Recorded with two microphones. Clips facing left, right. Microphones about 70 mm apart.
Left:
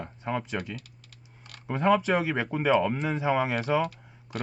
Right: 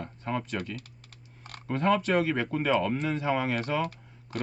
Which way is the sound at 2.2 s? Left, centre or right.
Centre.